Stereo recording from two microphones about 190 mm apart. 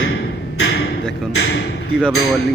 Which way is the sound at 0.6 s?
60° left (ahead or behind).